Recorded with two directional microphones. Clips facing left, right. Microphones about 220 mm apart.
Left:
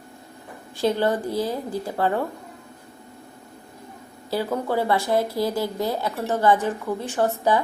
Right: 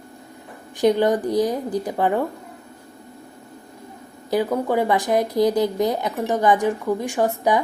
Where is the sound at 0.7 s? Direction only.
15° right (ahead or behind).